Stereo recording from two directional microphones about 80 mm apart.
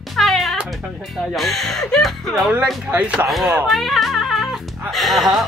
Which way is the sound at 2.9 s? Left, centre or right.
Centre.